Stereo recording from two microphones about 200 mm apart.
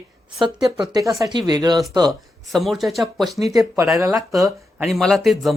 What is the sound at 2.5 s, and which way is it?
Speech, centre (ahead or behind).